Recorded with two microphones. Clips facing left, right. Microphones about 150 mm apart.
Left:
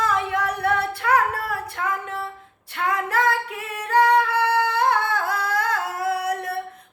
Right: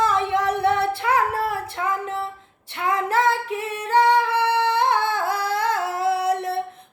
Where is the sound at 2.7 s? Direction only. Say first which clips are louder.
Right 2 dB; 25° right (ahead or behind).